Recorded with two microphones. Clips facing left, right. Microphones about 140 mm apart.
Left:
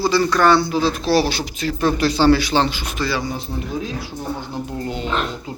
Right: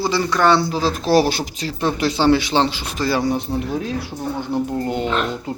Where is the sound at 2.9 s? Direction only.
40° right (ahead or behind).